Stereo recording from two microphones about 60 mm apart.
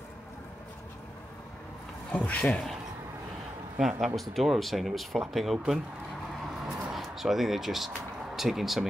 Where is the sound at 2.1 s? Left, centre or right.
Left.